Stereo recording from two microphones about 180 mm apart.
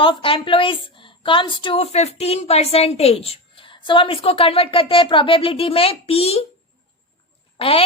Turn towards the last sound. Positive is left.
turn(degrees=30)  # may be behind; listen again after turning